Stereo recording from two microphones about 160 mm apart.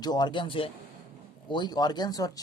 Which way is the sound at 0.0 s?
25° left (ahead or behind).